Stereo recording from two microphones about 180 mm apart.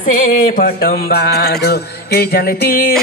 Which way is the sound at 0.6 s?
55° left (ahead or behind).